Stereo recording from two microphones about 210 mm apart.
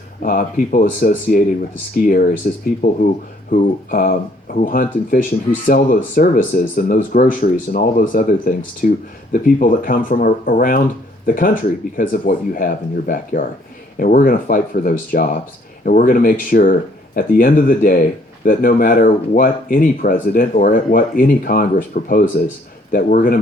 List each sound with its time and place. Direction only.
0.2 s speech: 40° left (ahead or behind)